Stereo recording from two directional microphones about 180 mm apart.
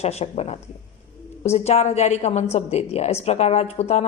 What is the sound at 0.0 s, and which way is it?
A woman's voice, 35° left (ahead or behind).